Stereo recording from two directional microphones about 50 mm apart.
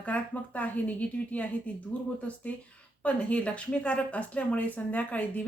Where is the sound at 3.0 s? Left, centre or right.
Left.